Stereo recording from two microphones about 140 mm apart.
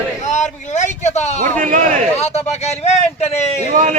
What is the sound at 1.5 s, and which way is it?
Speech, 65° right (ahead or behind).